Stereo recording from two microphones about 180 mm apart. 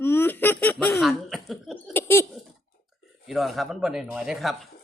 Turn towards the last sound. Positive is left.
turn(degrees=0)  # may be behind; listen again after turning